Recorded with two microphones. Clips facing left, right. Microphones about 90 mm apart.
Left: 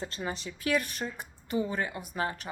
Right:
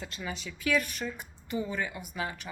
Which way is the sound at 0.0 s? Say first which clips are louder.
Left 3 dB; 35° left (ahead or behind).